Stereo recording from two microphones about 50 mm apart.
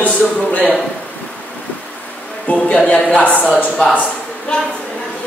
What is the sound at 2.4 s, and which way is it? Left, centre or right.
Speech, left.